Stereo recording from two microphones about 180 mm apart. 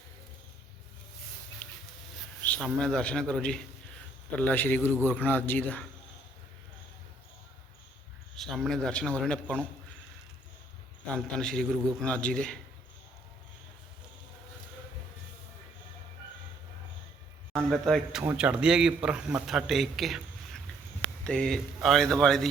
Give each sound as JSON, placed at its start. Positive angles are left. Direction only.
{"t": 2.4, "sound": "a sound", "side_deg": 10}
{"t": 2.6, "sound": "a man's voice", "side_deg": 5}
{"t": 8.4, "sound": "a man's voice", "side_deg": 0}
{"t": 11.1, "sound": "a man's voice", "side_deg": 5}
{"t": 17.5, "sound": "a man's voice", "side_deg": 0}